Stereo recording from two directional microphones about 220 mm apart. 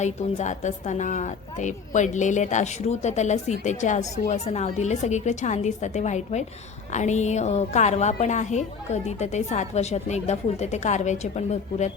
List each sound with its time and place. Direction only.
0.0 s a woman's voice: 30° left (ahead or behind)